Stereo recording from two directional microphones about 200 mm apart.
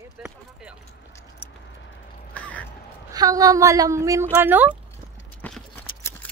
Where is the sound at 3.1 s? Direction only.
20° right (ahead or behind).